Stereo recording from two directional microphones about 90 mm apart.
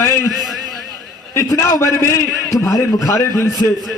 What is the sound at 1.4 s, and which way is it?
A man's voice, 35° left (ahead or behind).